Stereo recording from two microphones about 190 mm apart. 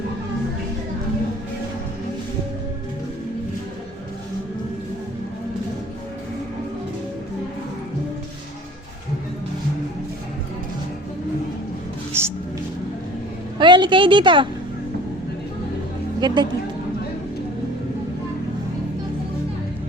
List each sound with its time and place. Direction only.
12.1 s music: 10° right (ahead or behind)
13.6 s a sound: 25° right (ahead or behind)
16.2 s speech: 20° right (ahead or behind)